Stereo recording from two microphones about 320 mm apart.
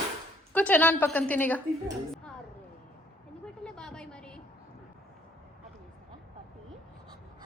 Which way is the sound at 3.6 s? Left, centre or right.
Centre.